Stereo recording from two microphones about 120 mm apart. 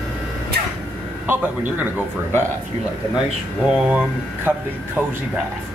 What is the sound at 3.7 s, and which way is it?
A man's voice, 10° right (ahead or behind).